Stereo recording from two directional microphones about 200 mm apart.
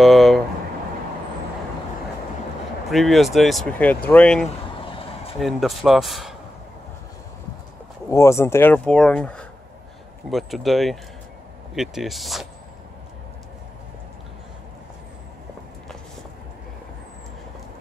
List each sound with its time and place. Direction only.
0.0 s a sound: centre (ahead or behind)
2.9 s speech: centre (ahead or behind)
4.7 s vehicle: 25° left (ahead or behind)
5.4 s speech: centre (ahead or behind)
8.1 s speech: 15° left (ahead or behind)